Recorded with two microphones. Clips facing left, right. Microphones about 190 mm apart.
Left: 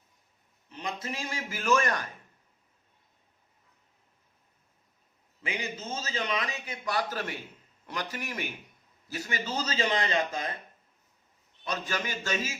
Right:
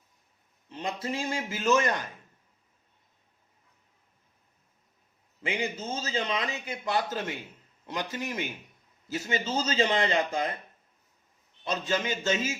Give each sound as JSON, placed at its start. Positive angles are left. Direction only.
{"t": 0.7, "sound": "a man's voice", "side_deg": -30}
{"t": 5.4, "sound": "a man's voice", "side_deg": -30}
{"t": 11.6, "sound": "a man's voice", "side_deg": -25}